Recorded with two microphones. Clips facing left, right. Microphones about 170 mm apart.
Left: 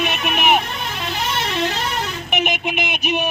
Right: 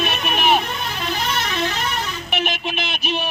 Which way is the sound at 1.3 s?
30° left (ahead or behind).